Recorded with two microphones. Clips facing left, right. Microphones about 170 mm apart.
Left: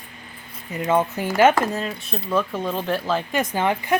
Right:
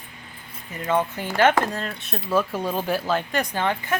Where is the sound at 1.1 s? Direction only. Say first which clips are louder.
Left 3 dB; 10° left (ahead or behind).